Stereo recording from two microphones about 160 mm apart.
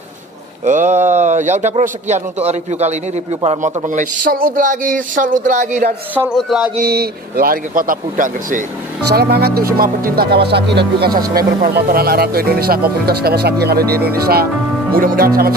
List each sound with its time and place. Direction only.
0.7 s a man's voice: 50° right (ahead or behind)
6.3 s a sound: 5° right (ahead or behind)
6.8 s speech: 80° right; by 8.6 s 55° right (ahead or behind)
9.1 s speech: 85° right; by 15.5 s 70° right (ahead or behind)